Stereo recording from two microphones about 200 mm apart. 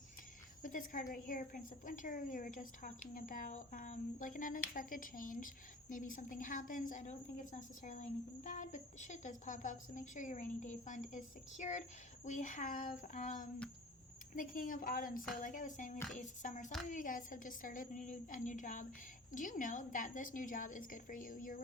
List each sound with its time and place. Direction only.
0.6 s a woman's voice: 40° left (ahead or behind)